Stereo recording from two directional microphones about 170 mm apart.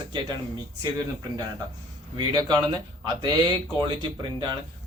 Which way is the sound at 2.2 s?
25° right (ahead or behind).